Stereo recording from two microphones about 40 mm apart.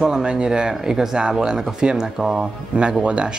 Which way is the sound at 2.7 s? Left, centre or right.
Right.